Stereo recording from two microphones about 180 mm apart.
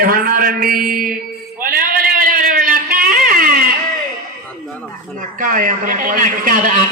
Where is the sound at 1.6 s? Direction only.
55° right (ahead or behind).